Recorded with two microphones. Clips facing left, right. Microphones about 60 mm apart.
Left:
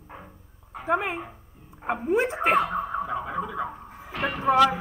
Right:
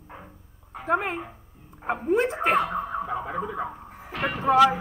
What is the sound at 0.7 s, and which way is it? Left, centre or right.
Speech, centre.